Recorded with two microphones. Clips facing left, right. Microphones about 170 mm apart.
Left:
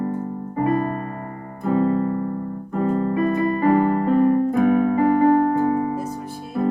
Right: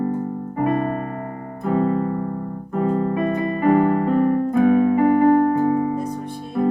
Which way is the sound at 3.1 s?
35° left (ahead or behind).